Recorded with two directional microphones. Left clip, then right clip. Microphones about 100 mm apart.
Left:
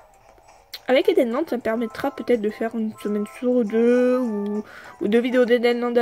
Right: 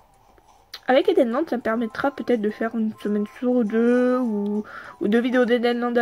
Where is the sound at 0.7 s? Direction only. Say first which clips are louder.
Even; 20° left (ahead or behind).